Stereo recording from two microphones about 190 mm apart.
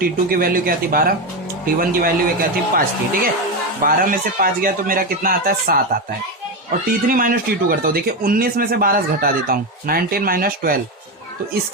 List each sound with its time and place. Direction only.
0.0 s speech: 50° right (ahead or behind)
7.1 s speech: 45° right (ahead or behind)